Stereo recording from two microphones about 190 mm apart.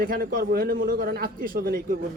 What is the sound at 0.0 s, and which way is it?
A man's voice, 50° right (ahead or behind).